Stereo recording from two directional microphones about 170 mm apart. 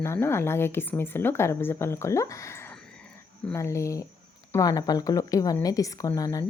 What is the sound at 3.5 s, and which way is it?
A woman's voice, 15° left (ahead or behind).